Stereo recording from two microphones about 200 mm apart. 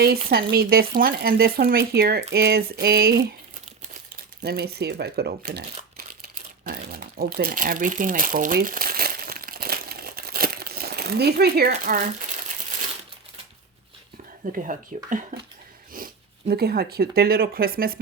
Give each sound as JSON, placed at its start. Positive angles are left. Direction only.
{"t": 0.0, "sound": "speech", "side_deg": -50}
{"t": 4.4, "sound": "speech", "side_deg": -50}
{"t": 6.2, "sound": "crumpling", "side_deg": -45}
{"t": 14.5, "sound": "speech", "side_deg": -40}